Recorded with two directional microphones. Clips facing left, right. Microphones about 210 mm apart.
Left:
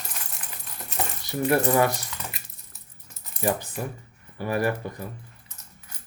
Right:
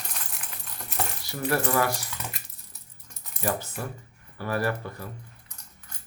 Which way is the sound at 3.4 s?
15° left (ahead or behind).